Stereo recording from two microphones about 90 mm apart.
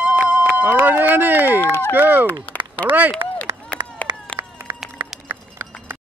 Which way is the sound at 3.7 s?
15° left (ahead or behind).